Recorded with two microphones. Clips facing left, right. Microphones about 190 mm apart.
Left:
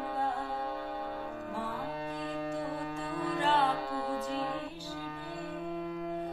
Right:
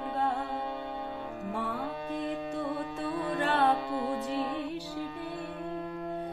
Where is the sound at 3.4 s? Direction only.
55° right (ahead or behind).